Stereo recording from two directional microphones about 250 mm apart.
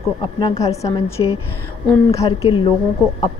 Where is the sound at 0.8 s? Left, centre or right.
Centre.